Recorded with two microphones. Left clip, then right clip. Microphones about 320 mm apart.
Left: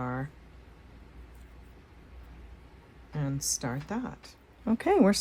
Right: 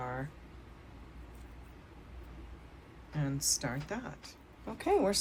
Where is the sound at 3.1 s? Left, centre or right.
Centre.